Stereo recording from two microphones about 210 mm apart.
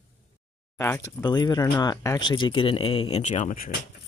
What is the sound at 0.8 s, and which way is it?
Speech, 10° left (ahead or behind).